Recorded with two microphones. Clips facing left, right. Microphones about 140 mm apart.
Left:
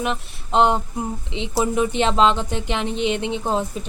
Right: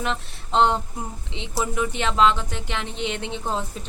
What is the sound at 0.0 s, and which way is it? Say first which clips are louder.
Speech: left 3 dB; 15° left (ahead or behind).